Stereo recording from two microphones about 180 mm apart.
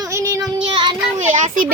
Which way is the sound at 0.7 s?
25° right (ahead or behind).